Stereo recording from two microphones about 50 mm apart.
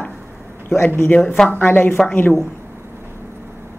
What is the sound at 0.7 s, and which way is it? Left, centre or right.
Speech, left.